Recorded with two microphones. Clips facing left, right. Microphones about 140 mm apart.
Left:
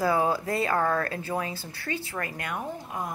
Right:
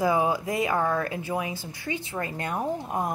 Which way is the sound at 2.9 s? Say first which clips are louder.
Right 4 dB; 45° right (ahead or behind).